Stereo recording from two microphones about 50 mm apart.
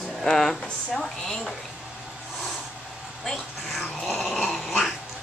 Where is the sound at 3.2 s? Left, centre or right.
Centre.